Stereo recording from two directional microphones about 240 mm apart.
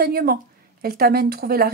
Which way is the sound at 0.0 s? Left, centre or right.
Right.